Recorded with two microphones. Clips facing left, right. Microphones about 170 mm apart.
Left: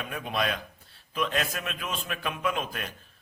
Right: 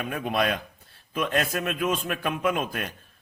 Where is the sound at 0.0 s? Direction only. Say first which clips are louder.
Right 4 dB; 50° right (ahead or behind).